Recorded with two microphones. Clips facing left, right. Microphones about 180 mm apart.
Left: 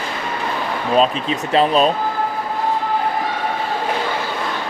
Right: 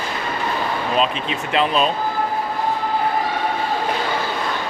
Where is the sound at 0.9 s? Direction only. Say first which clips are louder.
Left 7 dB; 40° left (ahead or behind).